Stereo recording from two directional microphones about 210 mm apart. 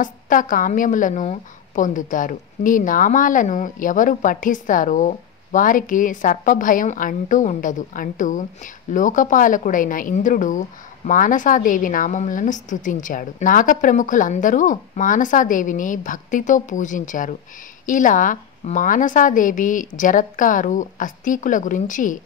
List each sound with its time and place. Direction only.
0.0 s a woman's voice: 40° left (ahead or behind)